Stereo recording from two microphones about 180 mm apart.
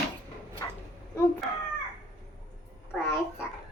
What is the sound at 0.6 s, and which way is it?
Dog, 20° left (ahead or behind).